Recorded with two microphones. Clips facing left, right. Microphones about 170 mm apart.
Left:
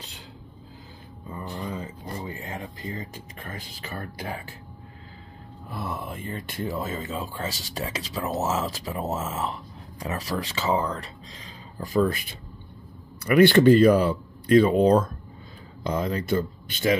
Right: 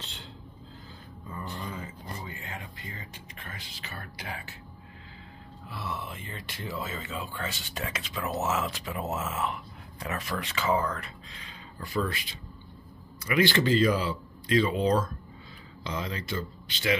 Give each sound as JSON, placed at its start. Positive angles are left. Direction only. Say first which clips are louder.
{"t": 1.4, "sound": "a sound", "louder": "left 5 dB", "side_deg": 35}
{"t": 2.8, "sound": "speech", "louder": "left 9 dB", "side_deg": 30}
{"t": 3.3, "sound": "speech", "louder": "left 6 dB", "side_deg": 50}
{"t": 5.7, "sound": "speech", "louder": "left 4 dB", "side_deg": 50}
{"t": 11.8, "sound": "speech", "louder": "left 8 dB", "side_deg": 45}
{"t": 13.2, "sound": "speech", "louder": "left 9 dB", "side_deg": 55}